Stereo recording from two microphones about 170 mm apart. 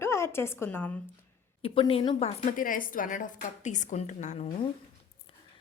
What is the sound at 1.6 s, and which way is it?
A woman's voice, 30° left (ahead or behind).